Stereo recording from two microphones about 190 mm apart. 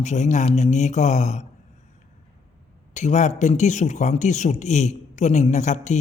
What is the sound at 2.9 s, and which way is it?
Speech, 40° left (ahead or behind).